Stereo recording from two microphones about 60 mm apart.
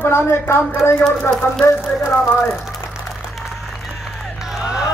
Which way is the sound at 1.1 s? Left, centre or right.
Centre.